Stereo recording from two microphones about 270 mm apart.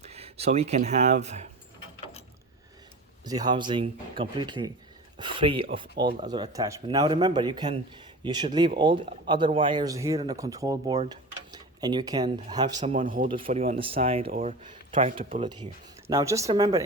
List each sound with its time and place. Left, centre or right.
0.0 s speech: right
3.2 s speech: centre
15.1 s speech: right
15.4 s speech: centre